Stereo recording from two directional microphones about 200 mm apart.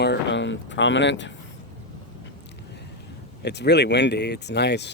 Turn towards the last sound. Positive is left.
turn(degrees=60)  # may be behind; listen again after turning